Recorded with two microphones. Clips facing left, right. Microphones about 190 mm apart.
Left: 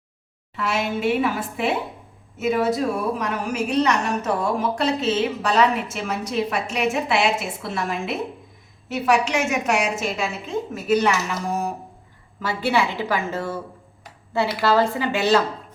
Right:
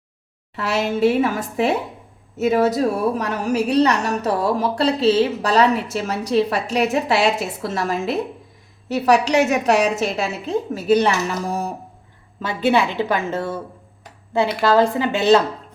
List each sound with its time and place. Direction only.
0.5 s a woman's voice: 40° right (ahead or behind)
12.4 s speech: 20° right (ahead or behind)